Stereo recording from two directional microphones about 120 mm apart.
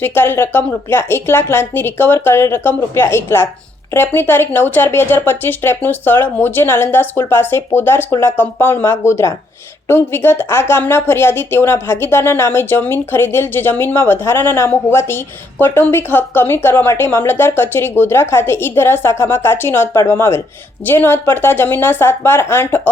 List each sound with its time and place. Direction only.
0.0 s speech: 20° left (ahead or behind)